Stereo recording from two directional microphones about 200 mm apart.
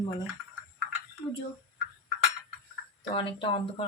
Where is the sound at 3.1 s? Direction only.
25° left (ahead or behind).